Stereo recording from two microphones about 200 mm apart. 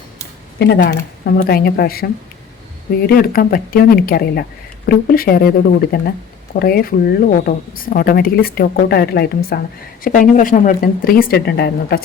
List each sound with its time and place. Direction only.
0.6 s speech: 55° left (ahead or behind)
3.1 s speech: 50° left (ahead or behind)